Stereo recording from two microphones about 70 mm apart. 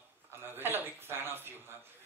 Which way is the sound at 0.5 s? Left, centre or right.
Right.